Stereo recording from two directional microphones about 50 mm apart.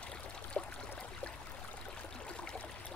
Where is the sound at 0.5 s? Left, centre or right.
Left.